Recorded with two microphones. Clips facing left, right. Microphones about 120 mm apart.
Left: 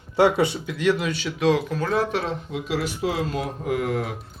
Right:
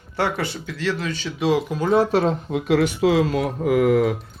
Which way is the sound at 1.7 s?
20° right (ahead or behind).